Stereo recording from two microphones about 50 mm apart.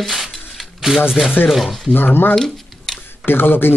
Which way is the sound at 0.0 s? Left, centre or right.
Centre.